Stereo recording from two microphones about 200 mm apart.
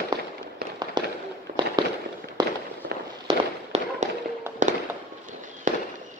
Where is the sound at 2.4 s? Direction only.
20° right (ahead or behind).